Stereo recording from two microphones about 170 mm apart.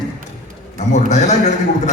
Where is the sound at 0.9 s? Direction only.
45° left (ahead or behind).